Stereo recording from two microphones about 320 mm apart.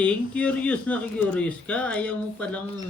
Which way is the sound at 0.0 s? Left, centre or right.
Centre.